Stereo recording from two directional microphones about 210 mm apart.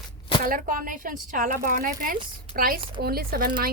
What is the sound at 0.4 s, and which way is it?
A woman's voice, 40° right (ahead or behind).